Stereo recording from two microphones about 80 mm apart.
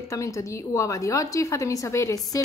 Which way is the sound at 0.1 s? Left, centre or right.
Left.